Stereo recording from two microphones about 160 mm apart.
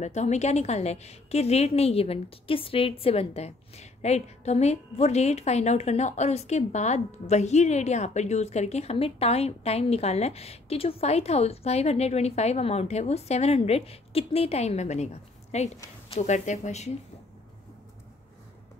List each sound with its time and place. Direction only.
0.0 s a woman's voice: 45° left (ahead or behind)